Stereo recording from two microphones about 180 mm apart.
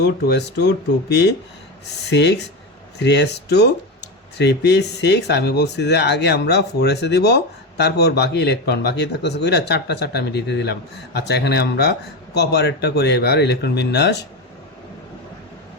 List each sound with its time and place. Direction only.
0.0 s speech: 70° left (ahead or behind)